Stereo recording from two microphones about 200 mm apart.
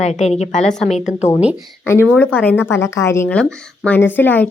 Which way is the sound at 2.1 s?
10° left (ahead or behind).